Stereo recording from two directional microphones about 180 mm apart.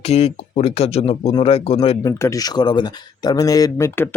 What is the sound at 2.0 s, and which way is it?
Speech, 20° left (ahead or behind).